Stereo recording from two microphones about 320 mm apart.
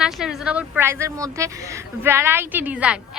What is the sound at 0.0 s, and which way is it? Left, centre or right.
A woman's voice, centre.